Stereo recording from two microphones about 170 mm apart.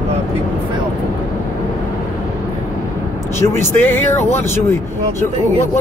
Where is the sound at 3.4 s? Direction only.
15° left (ahead or behind).